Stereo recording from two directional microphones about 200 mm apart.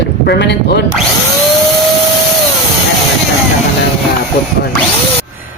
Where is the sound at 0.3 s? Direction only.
60° left (ahead or behind).